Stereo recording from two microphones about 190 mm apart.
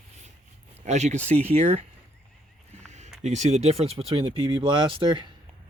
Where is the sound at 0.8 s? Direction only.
35° right (ahead or behind).